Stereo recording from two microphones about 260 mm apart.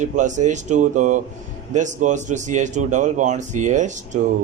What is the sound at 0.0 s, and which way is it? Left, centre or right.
Speech, right.